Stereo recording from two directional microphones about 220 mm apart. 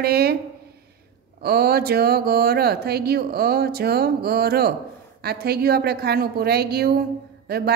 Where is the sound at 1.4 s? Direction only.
45° right (ahead or behind).